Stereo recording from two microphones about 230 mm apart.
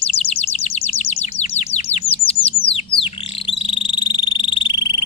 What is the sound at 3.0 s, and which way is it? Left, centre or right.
Frog, left.